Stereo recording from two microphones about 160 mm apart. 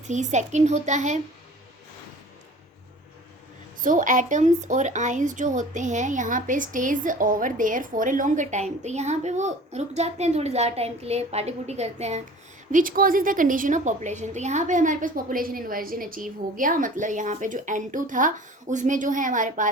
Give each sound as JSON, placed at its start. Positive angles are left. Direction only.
{"t": 0.1, "sound": "a woman's voice", "side_deg": -50}
{"t": 3.8, "sound": "a woman's voice", "side_deg": -55}
{"t": 12.7, "sound": "a woman's voice", "side_deg": -60}